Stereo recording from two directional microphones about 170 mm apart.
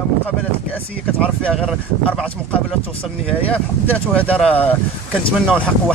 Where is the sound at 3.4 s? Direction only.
10° left (ahead or behind).